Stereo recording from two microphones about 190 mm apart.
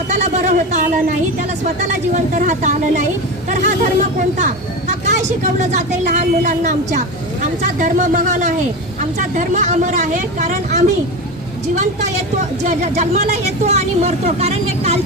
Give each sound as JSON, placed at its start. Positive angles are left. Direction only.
{"t": 0.1, "sound": "speech", "side_deg": -40}
{"t": 4.2, "sound": "speech", "side_deg": -40}
{"t": 12.4, "sound": "speech", "side_deg": -40}